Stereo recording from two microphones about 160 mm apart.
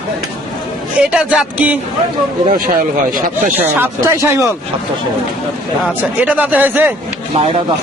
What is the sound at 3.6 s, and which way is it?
Speech, 10° right (ahead or behind).